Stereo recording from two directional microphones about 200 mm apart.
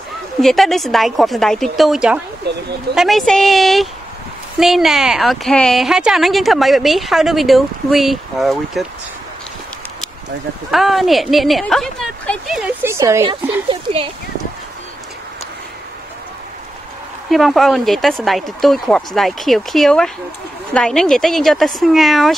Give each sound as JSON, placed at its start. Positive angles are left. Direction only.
{"t": 0.4, "sound": "speech", "side_deg": 0}
{"t": 2.4, "sound": "speech", "side_deg": -55}
{"t": 2.9, "sound": "speech", "side_deg": 0}
{"t": 10.7, "sound": "speech", "side_deg": 0}
{"t": 12.8, "sound": "speech", "side_deg": -15}
{"t": 17.3, "sound": "speech", "side_deg": 0}